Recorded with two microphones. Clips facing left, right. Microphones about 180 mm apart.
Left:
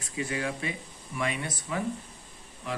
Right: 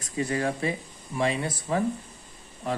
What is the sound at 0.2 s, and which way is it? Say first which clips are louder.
Speech: right 5 dB; 40° right (ahead or behind).